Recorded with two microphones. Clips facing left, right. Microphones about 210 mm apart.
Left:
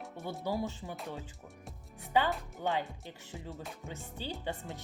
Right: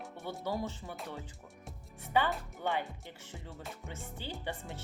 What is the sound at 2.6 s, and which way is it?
Speech, 15° left (ahead or behind).